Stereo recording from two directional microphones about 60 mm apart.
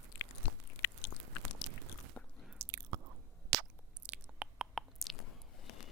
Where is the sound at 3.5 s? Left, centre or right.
Right.